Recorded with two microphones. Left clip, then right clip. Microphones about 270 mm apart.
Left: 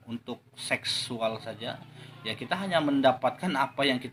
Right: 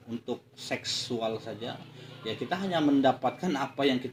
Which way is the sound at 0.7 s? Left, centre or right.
Left.